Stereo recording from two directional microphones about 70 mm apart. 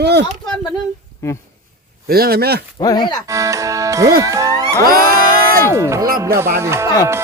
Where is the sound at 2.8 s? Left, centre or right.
Left.